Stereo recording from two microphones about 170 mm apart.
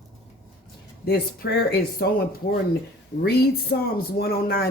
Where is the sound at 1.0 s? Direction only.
65° left (ahead or behind).